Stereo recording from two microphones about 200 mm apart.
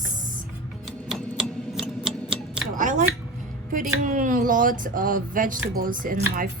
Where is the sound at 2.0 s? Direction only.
5° right (ahead or behind).